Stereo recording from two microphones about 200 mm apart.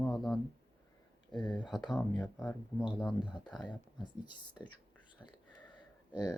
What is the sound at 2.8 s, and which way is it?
Speech, 5° right (ahead or behind).